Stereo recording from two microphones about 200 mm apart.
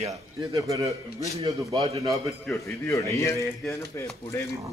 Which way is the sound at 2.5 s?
15° left (ahead or behind).